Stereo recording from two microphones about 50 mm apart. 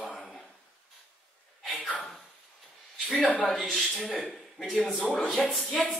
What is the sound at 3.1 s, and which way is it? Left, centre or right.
Speech, left.